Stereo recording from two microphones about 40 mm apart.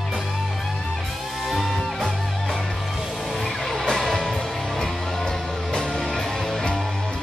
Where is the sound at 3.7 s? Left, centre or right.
Centre.